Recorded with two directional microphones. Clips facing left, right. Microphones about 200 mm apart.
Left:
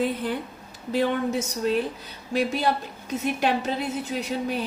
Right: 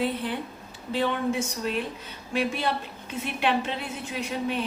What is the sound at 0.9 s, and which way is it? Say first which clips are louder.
Speech: left 2 dB; 40° left (ahead or behind).